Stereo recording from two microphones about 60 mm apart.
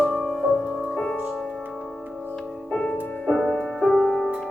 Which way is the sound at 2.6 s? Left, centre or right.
Centre.